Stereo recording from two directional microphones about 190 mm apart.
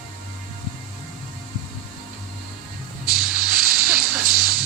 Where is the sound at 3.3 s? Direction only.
50° right (ahead or behind).